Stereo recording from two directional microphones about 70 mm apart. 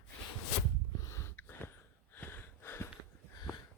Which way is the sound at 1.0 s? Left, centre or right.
Left.